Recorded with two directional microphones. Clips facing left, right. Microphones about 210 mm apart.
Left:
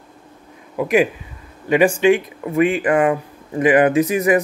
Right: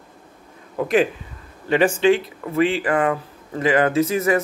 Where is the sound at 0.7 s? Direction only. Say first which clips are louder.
Left 2 dB; 10° left (ahead or behind).